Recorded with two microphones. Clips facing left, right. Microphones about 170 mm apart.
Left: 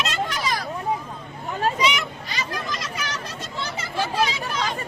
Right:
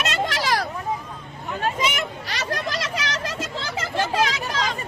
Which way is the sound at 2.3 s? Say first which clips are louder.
Right 3 dB; 75° right (ahead or behind).